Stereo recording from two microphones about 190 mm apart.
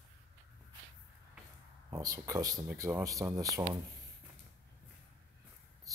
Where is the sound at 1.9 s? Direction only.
20° right (ahead or behind).